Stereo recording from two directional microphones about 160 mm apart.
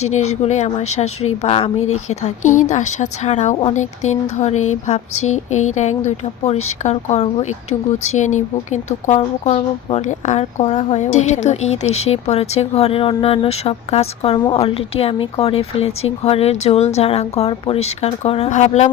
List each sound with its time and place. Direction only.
0.1 s a woman's voice: 45° left (ahead or behind)